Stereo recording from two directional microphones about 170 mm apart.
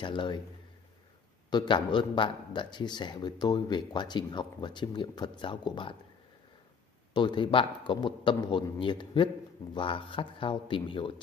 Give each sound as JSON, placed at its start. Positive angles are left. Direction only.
{"t": 0.0, "sound": "speech", "side_deg": 30}
{"t": 1.5, "sound": "speech", "side_deg": 30}
{"t": 7.2, "sound": "speech", "side_deg": 25}